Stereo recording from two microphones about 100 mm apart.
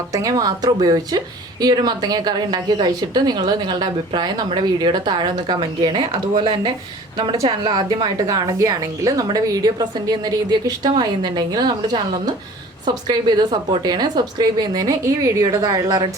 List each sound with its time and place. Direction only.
0.1 s a woman's voice: 35° right (ahead or behind)